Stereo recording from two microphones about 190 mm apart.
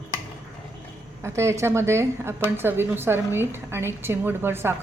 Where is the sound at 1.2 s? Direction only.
15° right (ahead or behind).